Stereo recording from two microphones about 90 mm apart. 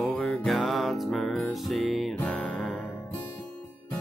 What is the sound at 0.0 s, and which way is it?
Music, 5° left (ahead or behind).